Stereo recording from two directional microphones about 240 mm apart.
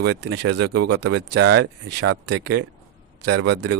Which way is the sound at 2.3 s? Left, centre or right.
Right.